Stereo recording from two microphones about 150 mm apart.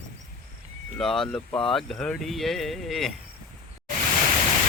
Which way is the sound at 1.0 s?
5° left (ahead or behind).